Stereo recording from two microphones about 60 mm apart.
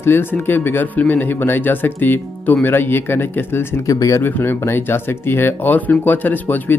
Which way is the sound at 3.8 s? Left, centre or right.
Left.